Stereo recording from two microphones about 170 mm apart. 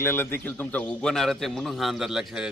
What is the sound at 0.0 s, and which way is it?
A man's voice, 15° left (ahead or behind).